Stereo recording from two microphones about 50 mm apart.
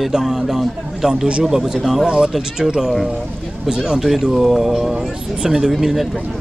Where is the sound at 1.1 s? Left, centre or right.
Centre.